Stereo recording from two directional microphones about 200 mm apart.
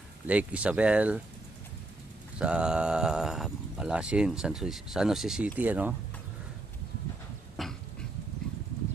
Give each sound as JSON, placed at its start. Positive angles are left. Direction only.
{"t": 0.3, "sound": "speech", "side_deg": -5}
{"t": 2.4, "sound": "speech", "side_deg": -5}
{"t": 7.5, "sound": "a sound", "side_deg": 0}